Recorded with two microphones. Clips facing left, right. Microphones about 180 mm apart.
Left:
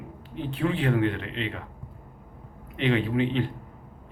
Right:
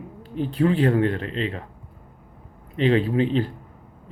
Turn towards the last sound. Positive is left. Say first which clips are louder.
# right 3 dB
turn(degrees=-35)  # may be behind; listen again after turning